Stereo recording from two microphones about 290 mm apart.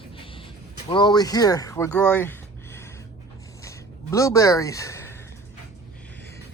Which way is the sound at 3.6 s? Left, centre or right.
Centre.